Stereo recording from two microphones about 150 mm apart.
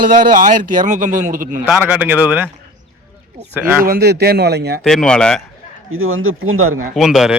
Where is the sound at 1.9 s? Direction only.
10° right (ahead or behind).